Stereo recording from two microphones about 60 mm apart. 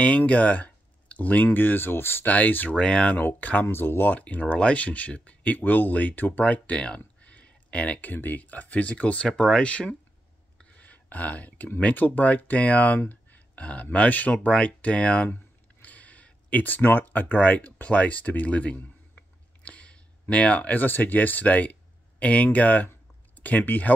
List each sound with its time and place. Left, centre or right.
0.0 s speech: left
2.2 s speech: left
2.7 s speech: centre
3.2 s speech: left
9.3 s speech: centre
10.6 s a sound: left
11.8 s speech: left
13.1 s a sound: left
13.9 s speech: left
15.2 s a sound: left
22.2 s speech: left